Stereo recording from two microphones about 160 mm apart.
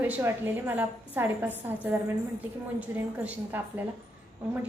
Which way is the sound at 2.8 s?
10° right (ahead or behind).